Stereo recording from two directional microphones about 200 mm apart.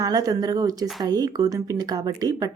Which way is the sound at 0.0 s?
20° right (ahead or behind).